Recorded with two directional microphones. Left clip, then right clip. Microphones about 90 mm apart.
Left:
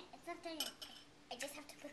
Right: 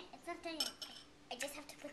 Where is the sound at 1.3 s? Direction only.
Centre (ahead or behind).